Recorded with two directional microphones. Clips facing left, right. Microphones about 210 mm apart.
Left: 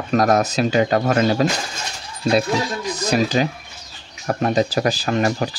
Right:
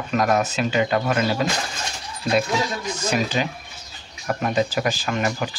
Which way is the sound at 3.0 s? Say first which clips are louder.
Left 5 dB; 40° left (ahead or behind).